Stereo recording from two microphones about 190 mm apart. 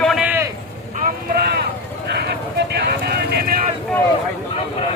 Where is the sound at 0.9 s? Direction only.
50° right (ahead or behind).